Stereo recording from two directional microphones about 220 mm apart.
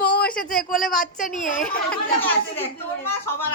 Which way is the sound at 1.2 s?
35° left (ahead or behind).